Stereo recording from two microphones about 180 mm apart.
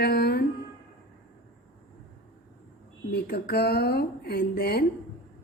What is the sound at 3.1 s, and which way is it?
Speech, 60° left (ahead or behind).